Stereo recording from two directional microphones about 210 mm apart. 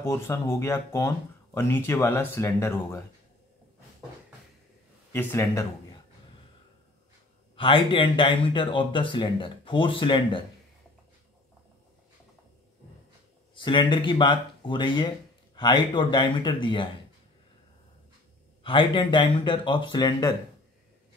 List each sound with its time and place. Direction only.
0.0 s speech: 10° left (ahead or behind)
5.1 s speech: 10° left (ahead or behind)
7.5 s speech: 25° left (ahead or behind)
13.6 s speech: 20° left (ahead or behind)
18.6 s speech: 25° left (ahead or behind)